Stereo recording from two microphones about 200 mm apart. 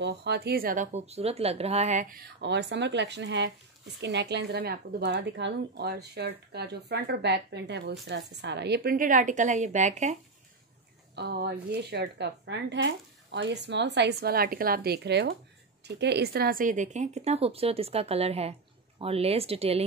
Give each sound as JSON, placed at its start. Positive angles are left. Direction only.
{"t": 0.0, "sound": "speech", "side_deg": -60}
{"t": 11.1, "sound": "speech", "side_deg": -55}